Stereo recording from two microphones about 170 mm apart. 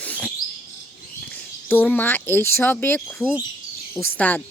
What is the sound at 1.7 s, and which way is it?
Speech, 10° left (ahead or behind).